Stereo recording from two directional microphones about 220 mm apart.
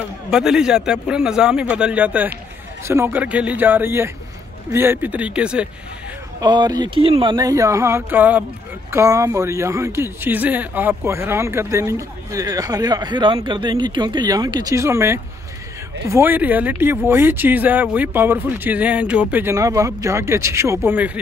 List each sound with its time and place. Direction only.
0.3 s speech: centre (ahead or behind)
6.4 s speech: 20° right (ahead or behind)